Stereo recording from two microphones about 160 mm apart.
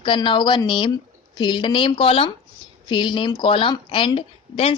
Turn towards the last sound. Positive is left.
turn(degrees=35)  # may be behind; listen again after turning